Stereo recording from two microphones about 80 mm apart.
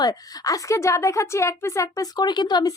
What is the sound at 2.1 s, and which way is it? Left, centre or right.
Speech, left.